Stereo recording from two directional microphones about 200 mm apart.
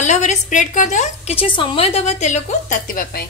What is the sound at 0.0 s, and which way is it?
A woman's voice, 35° left (ahead or behind).